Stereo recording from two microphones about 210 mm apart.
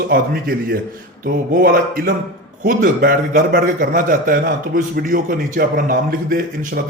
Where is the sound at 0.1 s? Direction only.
45° right (ahead or behind).